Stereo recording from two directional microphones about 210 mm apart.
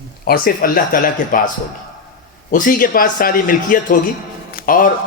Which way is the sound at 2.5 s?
40° left (ahead or behind).